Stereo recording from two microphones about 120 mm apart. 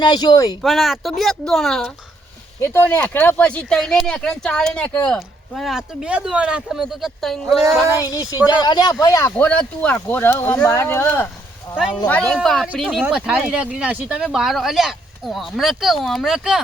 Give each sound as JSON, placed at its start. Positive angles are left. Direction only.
{"t": 0.0, "sound": "speech", "side_deg": 35}
{"t": 0.6, "sound": "speech", "side_deg": 0}
{"t": 2.6, "sound": "speech", "side_deg": 15}
{"t": 8.0, "sound": "speech", "side_deg": 30}
{"t": 9.5, "sound": "speech", "side_deg": 10}
{"t": 12.0, "sound": "speech", "side_deg": 10}
{"t": 13.0, "sound": "speech", "side_deg": -10}